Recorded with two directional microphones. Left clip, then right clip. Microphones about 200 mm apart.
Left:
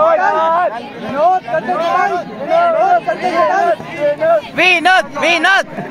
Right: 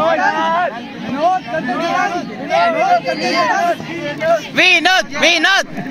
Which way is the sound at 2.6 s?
35° left (ahead or behind).